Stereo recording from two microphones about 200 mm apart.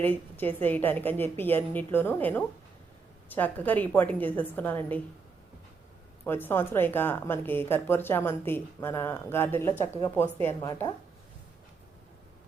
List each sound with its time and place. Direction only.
0.0 s a woman's voice: 10° left (ahead or behind)
6.2 s a woman's voice: 10° left (ahead or behind)